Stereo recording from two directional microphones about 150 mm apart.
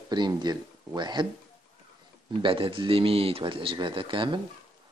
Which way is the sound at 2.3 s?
35° right (ahead or behind).